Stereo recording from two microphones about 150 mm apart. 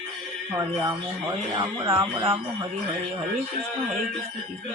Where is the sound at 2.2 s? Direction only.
30° right (ahead or behind).